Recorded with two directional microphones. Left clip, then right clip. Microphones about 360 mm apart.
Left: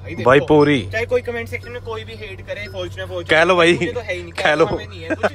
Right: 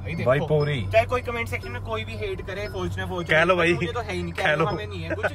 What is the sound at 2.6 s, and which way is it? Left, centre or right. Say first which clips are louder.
Speech: left 3 dB; centre.